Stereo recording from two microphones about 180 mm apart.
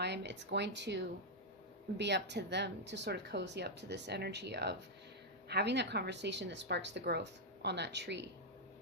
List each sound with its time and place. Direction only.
0.0 s speech: 70° right (ahead or behind)